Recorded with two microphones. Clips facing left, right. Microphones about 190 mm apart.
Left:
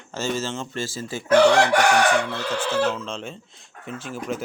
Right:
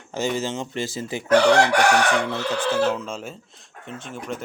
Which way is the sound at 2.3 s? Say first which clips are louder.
Right 2 dB; 15° right (ahead or behind).